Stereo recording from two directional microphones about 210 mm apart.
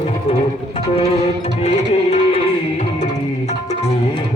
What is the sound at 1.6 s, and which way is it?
Music, 30° left (ahead or behind).